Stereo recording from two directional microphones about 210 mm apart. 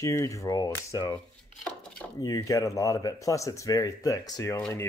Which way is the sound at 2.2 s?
15° left (ahead or behind).